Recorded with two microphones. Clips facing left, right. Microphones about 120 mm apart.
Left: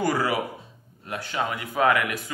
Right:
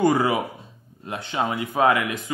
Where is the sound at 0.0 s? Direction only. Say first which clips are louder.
Right 4 dB; 25° right (ahead or behind).